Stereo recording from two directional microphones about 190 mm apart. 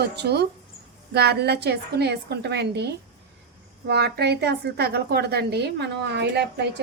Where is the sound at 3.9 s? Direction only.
60° right (ahead or behind).